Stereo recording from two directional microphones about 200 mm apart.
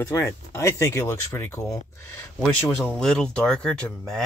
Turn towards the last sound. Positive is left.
turn(degrees=5)  # may be behind; listen again after turning